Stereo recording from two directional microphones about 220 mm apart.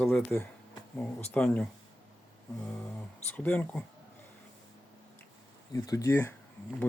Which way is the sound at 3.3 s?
5° left (ahead or behind).